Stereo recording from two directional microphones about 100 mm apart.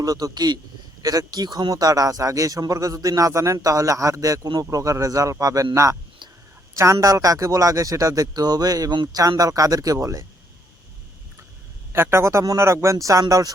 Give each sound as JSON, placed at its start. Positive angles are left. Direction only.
{"t": 0.0, "sound": "speech", "side_deg": -40}
{"t": 11.9, "sound": "speech", "side_deg": -25}